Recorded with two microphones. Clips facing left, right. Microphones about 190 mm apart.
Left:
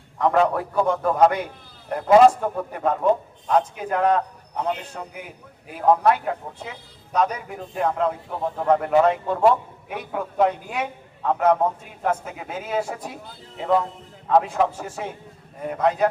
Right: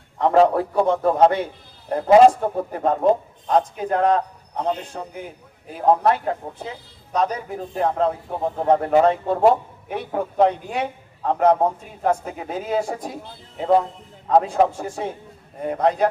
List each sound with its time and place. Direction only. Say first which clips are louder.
0.2 s a man's voice: right 4 dB; 30° right (ahead or behind)
14.3 s a man's voice: right 2 dB; 30° right (ahead or behind)